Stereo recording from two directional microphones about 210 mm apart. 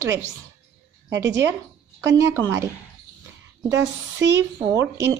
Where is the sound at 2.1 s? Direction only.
15° right (ahead or behind).